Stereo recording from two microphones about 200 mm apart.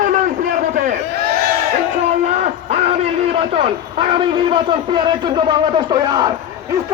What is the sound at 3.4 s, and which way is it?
A man's voice, 30° right (ahead or behind).